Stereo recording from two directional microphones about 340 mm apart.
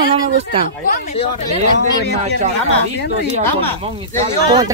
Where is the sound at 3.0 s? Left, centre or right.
Left.